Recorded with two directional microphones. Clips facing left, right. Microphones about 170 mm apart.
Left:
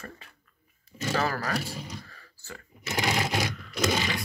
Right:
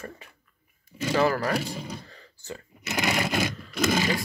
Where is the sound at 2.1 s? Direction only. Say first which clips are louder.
Right 6 dB; 20° right (ahead or behind).